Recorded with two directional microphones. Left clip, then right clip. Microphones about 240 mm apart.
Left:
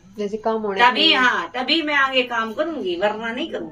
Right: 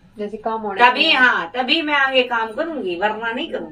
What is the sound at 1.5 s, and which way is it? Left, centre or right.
A woman's voice, centre.